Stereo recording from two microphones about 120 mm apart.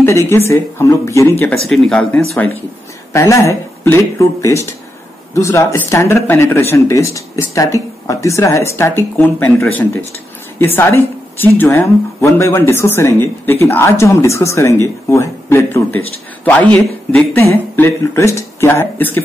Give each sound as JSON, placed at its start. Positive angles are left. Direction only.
{"t": 0.3, "sound": "speech", "side_deg": 20}
{"t": 1.6, "sound": "speech", "side_deg": 5}
{"t": 3.1, "sound": "speech", "side_deg": 25}
{"t": 16.7, "sound": "speech", "side_deg": 10}
{"t": 17.4, "sound": "speech", "side_deg": 20}